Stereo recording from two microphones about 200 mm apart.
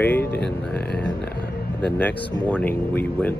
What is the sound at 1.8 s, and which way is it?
Speech, 5° left (ahead or behind).